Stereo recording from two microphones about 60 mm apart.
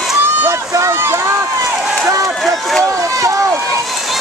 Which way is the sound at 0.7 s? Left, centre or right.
Right.